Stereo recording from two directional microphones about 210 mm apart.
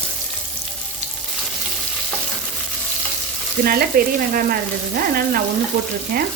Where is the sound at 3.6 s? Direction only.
45° right (ahead or behind).